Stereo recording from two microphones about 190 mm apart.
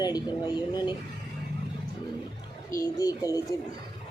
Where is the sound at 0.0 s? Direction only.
20° left (ahead or behind).